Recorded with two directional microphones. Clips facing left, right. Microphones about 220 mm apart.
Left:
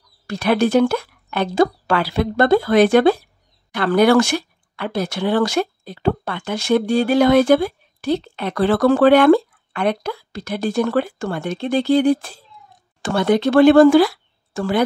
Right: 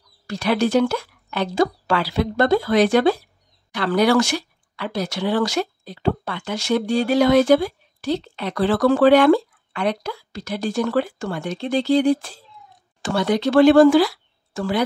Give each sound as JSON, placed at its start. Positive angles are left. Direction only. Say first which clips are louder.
{"t": 0.3, "sound": "speech", "louder": "left 3 dB", "side_deg": 55}